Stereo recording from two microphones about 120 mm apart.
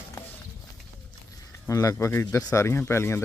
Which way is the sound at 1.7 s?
30° left (ahead or behind).